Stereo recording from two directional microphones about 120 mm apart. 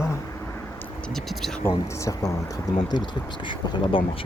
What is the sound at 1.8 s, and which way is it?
Speech, 25° left (ahead or behind).